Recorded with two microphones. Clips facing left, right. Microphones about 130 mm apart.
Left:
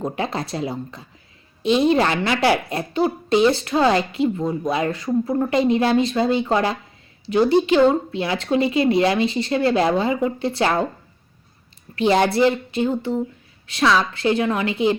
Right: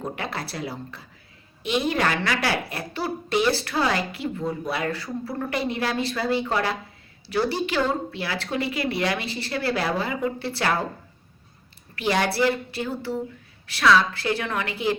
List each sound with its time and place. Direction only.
0.0 s speech: 25° left (ahead or behind)
11.9 s speech: 25° left (ahead or behind)